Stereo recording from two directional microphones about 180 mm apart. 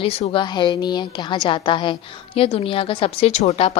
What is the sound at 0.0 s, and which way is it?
A woman's voice, 30° left (ahead or behind).